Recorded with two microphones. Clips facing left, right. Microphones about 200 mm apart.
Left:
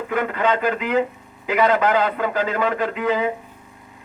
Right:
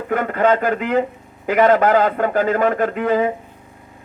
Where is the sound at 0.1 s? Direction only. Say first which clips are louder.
Right 5 dB; 50° right (ahead or behind).